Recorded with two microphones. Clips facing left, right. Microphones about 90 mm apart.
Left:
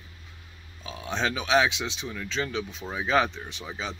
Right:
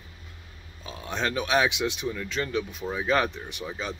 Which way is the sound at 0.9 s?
Centre (ahead or behind).